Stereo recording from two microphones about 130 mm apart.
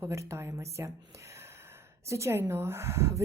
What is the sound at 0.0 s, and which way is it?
Speech, 20° right (ahead or behind).